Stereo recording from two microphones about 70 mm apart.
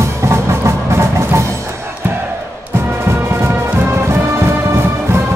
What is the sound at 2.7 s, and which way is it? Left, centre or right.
Music, right.